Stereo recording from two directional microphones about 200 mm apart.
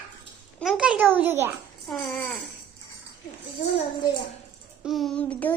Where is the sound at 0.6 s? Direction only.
5° right (ahead or behind).